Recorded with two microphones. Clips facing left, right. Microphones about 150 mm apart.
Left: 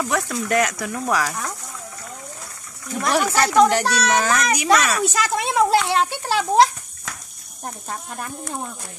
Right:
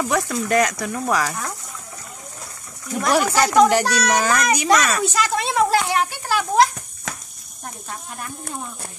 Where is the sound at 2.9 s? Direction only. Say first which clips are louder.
Right 2 dB; 5° right (ahead or behind); by 5.7 s 15° left (ahead or behind).